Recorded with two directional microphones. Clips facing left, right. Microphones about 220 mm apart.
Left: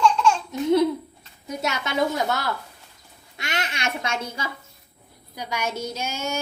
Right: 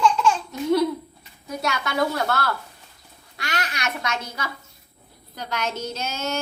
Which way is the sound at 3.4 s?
25° left (ahead or behind).